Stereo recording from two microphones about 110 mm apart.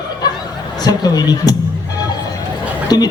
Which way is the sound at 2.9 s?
40° left (ahead or behind).